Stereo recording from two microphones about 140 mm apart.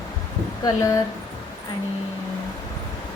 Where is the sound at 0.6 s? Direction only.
25° left (ahead or behind).